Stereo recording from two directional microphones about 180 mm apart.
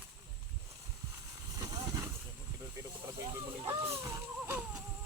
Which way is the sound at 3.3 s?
15° right (ahead or behind).